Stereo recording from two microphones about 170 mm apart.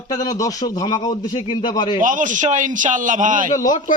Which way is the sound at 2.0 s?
50° right (ahead or behind).